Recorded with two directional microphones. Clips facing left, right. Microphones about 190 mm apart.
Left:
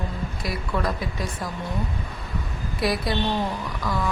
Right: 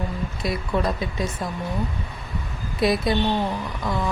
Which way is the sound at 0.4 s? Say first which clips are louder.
Right 3 dB; 25° right (ahead or behind).